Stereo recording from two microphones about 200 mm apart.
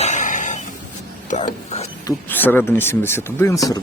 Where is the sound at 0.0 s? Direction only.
40° left (ahead or behind).